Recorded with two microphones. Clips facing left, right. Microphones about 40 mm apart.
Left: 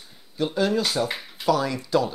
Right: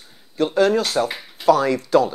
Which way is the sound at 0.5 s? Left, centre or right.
Right.